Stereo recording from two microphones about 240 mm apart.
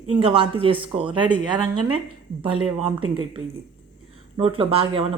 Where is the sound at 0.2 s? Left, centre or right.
Right.